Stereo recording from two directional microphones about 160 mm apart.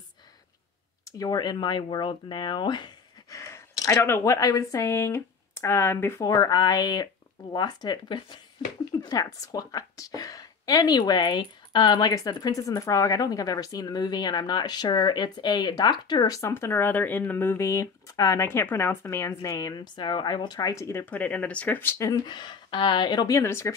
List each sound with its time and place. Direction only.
1.1 s a woman's voice: 25° left (ahead or behind)